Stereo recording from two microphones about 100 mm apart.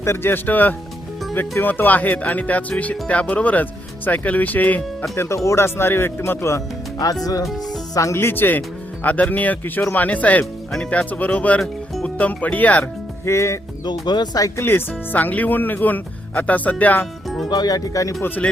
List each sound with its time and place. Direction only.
0.0 s speech: 25° left (ahead or behind)
7.0 s speech: 35° left (ahead or behind)
7.4 s speech: centre (ahead or behind)
7.9 s speech: 30° left (ahead or behind)
13.2 s speech: 30° left (ahead or behind)
13.8 s speech: 45° left (ahead or behind)
14.6 s speech: 20° left (ahead or behind)
17.2 s music: centre (ahead or behind)
17.5 s speech: 40° left (ahead or behind)